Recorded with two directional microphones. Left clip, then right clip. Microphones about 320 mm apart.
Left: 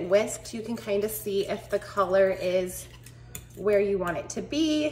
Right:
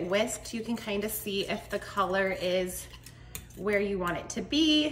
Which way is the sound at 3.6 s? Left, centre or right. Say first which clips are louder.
Left 5 dB; centre.